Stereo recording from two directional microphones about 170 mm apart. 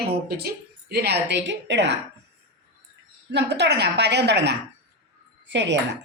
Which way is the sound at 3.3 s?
80° right.